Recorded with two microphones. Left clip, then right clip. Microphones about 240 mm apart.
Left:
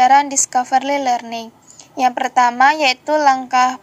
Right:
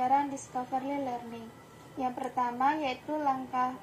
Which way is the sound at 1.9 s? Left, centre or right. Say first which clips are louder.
Left 18 dB; left.